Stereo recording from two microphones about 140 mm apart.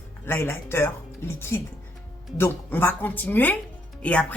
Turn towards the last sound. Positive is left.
turn(degrees=10)  # may be behind; listen again after turning